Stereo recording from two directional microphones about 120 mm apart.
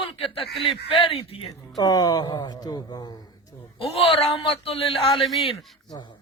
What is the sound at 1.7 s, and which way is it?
A man's voice, 30° left (ahead or behind).